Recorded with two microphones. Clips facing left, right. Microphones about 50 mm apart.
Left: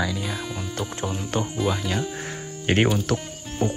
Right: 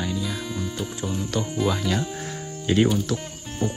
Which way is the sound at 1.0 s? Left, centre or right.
Left.